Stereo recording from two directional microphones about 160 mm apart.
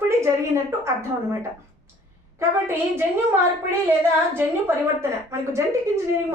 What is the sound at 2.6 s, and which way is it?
A woman's voice, 15° right (ahead or behind).